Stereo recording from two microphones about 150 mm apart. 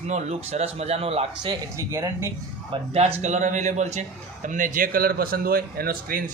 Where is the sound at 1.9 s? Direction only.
20° right (ahead or behind).